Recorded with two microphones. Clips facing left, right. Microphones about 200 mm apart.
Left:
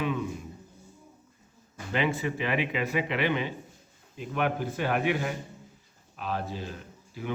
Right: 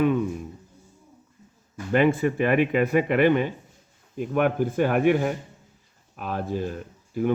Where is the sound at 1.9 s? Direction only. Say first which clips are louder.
Right 8 dB; 50° right (ahead or behind).